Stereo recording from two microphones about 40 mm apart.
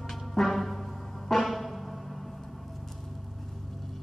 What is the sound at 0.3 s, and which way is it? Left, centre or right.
Music, centre.